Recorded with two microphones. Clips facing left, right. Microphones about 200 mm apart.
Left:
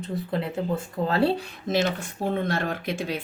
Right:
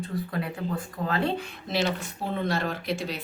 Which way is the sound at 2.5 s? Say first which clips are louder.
Left 1 dB; 50° left (ahead or behind).